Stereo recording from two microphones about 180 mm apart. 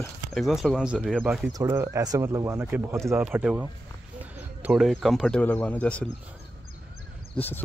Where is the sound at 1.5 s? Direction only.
15° right (ahead or behind); by 6.1 s 5° left (ahead or behind).